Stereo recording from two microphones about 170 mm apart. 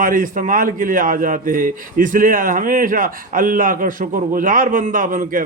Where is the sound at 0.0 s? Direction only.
55° right (ahead or behind).